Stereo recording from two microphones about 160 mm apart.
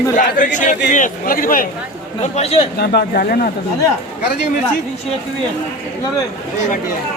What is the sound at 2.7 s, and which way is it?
Speech, 85° left.